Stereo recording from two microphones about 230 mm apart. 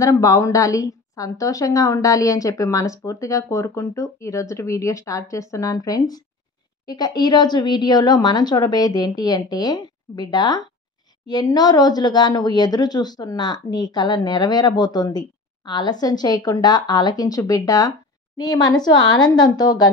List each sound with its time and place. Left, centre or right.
0.0 s speech: centre